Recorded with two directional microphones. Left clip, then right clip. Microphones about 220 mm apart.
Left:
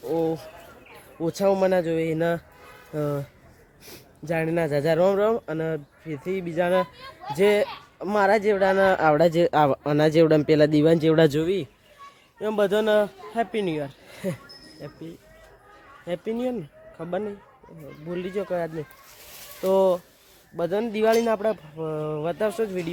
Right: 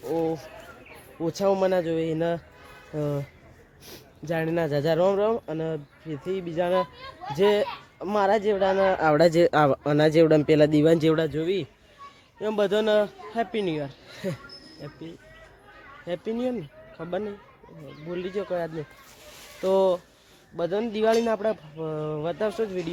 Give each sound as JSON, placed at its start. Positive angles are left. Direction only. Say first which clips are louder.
{"t": 0.0, "sound": "bird", "louder": "left 2 dB", "side_deg": 10}
{"t": 1.2, "sound": "speech", "louder": "left 2 dB", "side_deg": 10}
{"t": 9.1, "sound": "speech", "louder": "even", "side_deg": -5}
{"t": 16.0, "sound": "speech", "louder": "left 1 dB", "side_deg": 0}